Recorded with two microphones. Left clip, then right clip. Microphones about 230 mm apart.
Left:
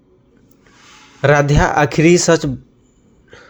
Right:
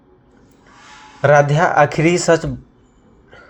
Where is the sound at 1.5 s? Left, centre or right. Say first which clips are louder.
Right 1 dB; left.